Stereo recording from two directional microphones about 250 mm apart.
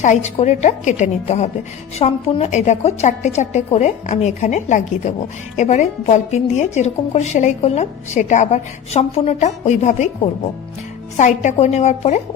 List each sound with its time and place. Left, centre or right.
0.0 s a woman's voice: left
11.2 s a woman's voice: left